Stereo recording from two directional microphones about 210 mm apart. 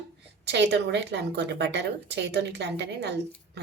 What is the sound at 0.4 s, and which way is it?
A woman's voice, 55° right (ahead or behind).